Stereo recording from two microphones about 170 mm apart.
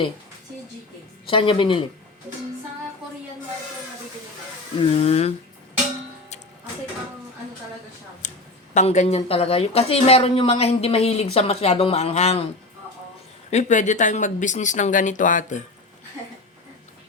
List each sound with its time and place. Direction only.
1.3 s speech: 30° left (ahead or behind)
4.9 s speech: 35° left (ahead or behind)
8.2 s a sound: 45° left (ahead or behind)
8.7 s speech: 45° left (ahead or behind)
13.5 s speech: 45° left (ahead or behind)